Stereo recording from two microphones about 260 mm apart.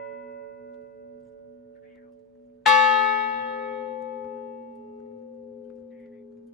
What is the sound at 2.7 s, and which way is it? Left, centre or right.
Church bell, centre.